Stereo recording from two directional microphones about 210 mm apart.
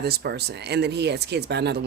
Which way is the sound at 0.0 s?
50° right (ahead or behind).